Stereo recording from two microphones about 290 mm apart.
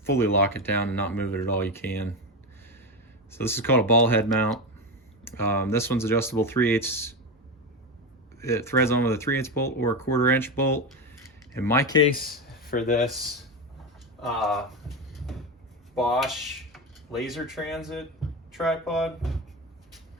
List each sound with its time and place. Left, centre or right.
0.1 s speech: centre
3.3 s speech: centre
8.4 s speech: centre
12.6 s speech: left
14.2 s speech: centre
15.1 s train: centre
16.0 s speech: centre